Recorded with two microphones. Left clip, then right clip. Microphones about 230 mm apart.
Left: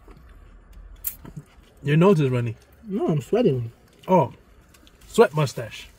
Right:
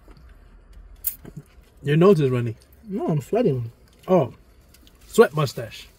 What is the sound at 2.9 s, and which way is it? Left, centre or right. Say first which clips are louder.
Speech: left 1 dB; left.